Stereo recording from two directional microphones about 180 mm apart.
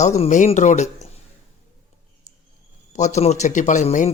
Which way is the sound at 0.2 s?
40° left (ahead or behind).